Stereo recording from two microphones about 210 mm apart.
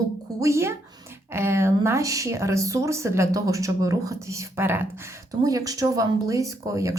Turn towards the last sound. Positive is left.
turn(degrees=-15)  # may be behind; listen again after turning